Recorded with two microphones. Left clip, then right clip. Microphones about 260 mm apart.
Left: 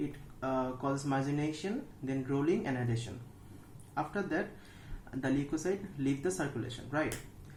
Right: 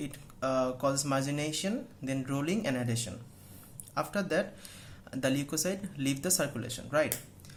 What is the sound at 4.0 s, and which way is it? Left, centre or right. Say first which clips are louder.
Speech: right 4 dB; right.